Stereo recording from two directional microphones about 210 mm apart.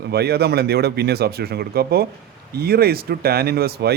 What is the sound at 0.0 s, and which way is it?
A man's voice, 50° right (ahead or behind).